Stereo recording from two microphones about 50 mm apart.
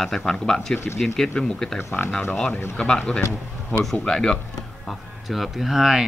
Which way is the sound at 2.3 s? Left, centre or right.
Left.